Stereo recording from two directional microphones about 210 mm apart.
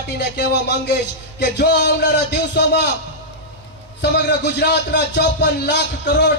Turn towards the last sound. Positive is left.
turn(degrees=50)  # may be behind; listen again after turning